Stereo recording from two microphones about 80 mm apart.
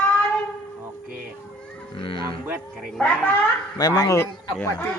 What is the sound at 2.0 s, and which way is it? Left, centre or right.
Livestock, left.